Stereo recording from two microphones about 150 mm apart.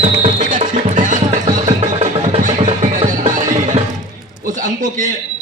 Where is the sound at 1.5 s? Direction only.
60° right (ahead or behind).